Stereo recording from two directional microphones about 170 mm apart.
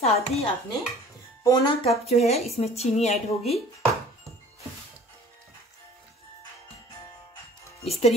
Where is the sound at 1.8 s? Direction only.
40° left (ahead or behind).